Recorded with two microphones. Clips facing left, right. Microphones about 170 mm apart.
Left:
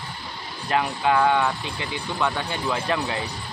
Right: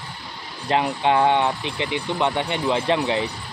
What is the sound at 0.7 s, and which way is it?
Speech, 25° right (ahead or behind).